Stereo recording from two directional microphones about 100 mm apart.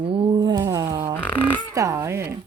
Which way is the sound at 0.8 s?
40° right (ahead or behind).